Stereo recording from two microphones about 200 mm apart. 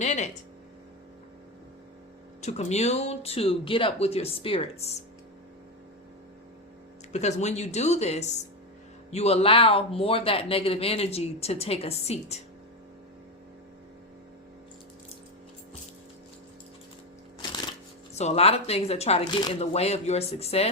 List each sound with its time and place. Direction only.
0.0 s speech: 35° left (ahead or behind)
2.4 s speech: 35° left (ahead or behind)
7.1 s speech: 35° left (ahead or behind)
18.1 s speech: 35° left (ahead or behind)